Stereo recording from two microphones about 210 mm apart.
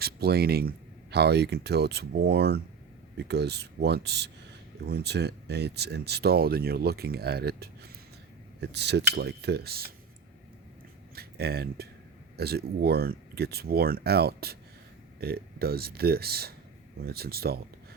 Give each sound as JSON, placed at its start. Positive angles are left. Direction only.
{"t": 0.0, "sound": "speech", "side_deg": -50}
{"t": 11.1, "sound": "speech", "side_deg": -50}